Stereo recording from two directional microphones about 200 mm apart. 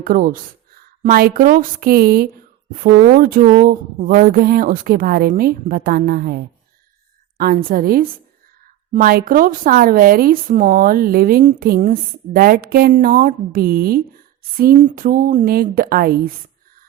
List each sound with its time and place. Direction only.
0.0 s a woman's voice: 45° right (ahead or behind)